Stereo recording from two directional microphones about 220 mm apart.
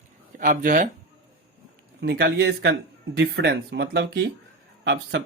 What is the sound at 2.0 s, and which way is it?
Speech, 50° right (ahead or behind).